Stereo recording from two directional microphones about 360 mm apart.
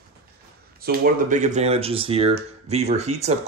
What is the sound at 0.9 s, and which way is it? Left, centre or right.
Speech, right.